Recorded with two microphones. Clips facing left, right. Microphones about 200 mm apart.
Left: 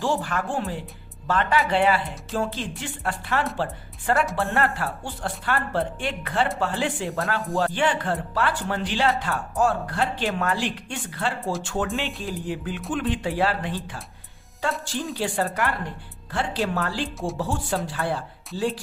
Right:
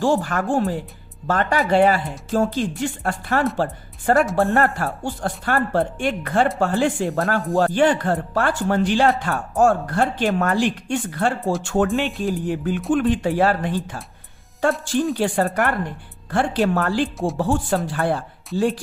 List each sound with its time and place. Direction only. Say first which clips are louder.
0.0 s speech: right 6 dB; 45° right (ahead or behind)
11.9 s speech: right 6 dB; centre (ahead or behind)
12.2 s speech: right 7 dB; 50° right (ahead or behind)